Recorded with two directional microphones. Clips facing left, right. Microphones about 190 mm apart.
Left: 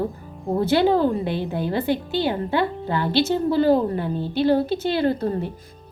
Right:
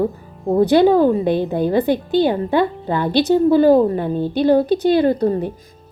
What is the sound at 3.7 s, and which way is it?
Speech, 50° right (ahead or behind).